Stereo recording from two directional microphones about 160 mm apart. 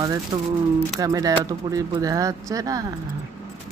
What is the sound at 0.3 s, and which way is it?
Speech, 30° right (ahead or behind).